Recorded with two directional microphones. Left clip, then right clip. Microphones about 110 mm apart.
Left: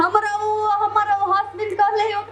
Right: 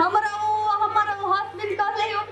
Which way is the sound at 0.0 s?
40° left (ahead or behind).